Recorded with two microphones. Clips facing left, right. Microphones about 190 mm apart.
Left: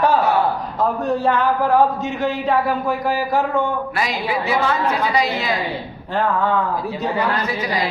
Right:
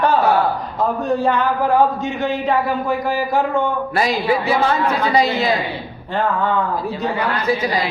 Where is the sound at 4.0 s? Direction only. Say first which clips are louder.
Right 7 dB; 30° right (ahead or behind).